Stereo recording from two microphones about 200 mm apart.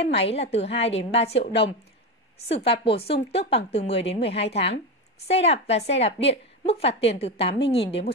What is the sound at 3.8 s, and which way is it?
A woman's voice, 30° left (ahead or behind).